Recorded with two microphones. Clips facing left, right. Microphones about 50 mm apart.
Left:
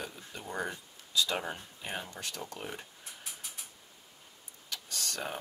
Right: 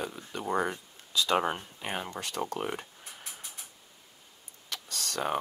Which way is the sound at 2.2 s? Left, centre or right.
Right.